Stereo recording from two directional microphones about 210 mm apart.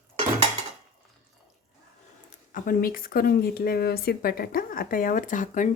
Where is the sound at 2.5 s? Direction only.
40° left (ahead or behind).